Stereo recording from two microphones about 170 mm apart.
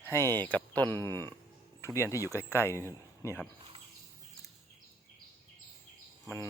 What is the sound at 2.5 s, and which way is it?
Speech, 15° left (ahead or behind).